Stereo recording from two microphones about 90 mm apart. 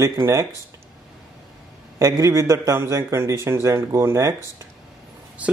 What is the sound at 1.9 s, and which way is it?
A man's voice, 35° right (ahead or behind).